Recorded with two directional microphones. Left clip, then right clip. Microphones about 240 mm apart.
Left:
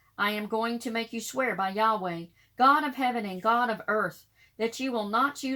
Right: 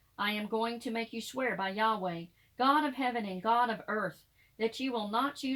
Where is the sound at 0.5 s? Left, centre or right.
Left.